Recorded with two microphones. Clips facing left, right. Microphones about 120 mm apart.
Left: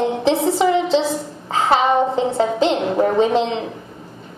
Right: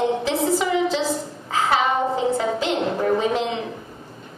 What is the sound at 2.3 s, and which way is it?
Music, 25° left (ahead or behind).